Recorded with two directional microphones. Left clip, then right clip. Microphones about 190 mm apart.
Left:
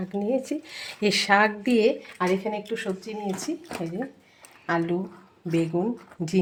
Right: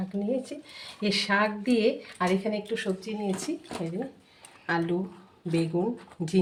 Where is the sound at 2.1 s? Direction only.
30° left (ahead or behind).